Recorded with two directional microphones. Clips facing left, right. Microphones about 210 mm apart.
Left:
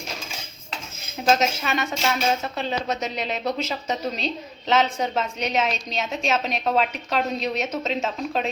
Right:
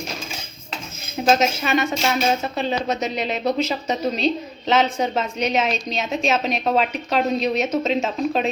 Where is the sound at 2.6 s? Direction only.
5° right (ahead or behind).